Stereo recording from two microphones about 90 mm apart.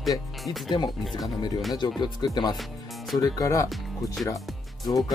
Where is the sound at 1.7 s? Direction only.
55° left (ahead or behind); by 3.7 s 40° left (ahead or behind).